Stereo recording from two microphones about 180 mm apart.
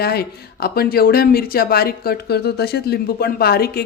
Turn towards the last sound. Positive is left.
turn(degrees=60)  # may be behind; listen again after turning